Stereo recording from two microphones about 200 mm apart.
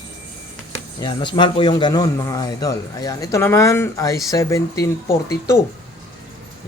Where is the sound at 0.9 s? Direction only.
25° left (ahead or behind).